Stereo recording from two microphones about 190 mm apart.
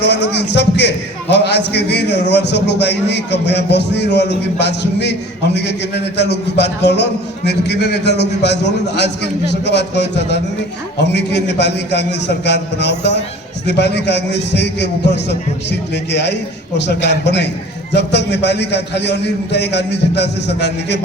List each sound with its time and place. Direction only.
0.0 s a man's voice: 60° left (ahead or behind)